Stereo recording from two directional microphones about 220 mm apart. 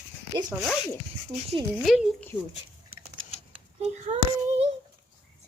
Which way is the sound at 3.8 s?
30° right (ahead or behind).